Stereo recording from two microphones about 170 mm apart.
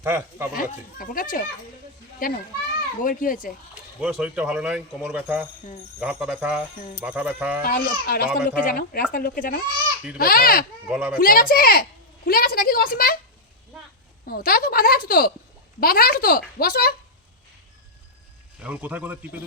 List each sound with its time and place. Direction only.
0.0 s speech: 15° right (ahead or behind)
0.5 s a child's voice: 55° left (ahead or behind)
4.0 s speech: 5° right (ahead or behind)
7.6 s speech: 60° left (ahead or behind)
10.8 s speech: 5° right (ahead or behind)
11.2 s a woman's voice: 60° left (ahead or behind)
14.3 s speech: 60° left (ahead or behind)
18.6 s speech: 10° right (ahead or behind)